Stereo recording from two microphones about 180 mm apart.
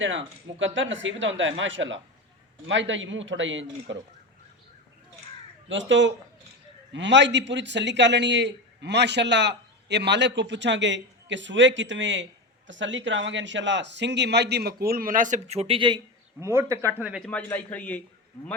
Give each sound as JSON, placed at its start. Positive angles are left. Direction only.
{"t": 0.0, "sound": "speech", "side_deg": -90}
{"t": 5.6, "sound": "a man's voice", "side_deg": -90}
{"t": 16.4, "sound": "speech", "side_deg": -15}
{"t": 17.0, "sound": "a man's voice", "side_deg": -5}